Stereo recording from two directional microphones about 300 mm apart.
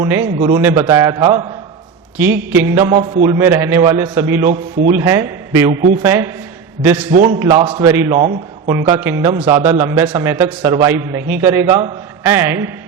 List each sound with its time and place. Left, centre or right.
0.0 s a man's voice: centre
7.1 s a man's voice: right
7.3 s a man's voice: centre